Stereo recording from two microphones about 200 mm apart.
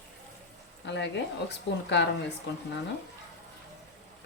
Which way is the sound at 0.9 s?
60° left (ahead or behind).